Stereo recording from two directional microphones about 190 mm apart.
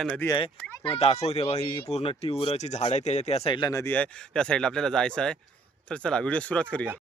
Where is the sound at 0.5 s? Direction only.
10° left (ahead or behind).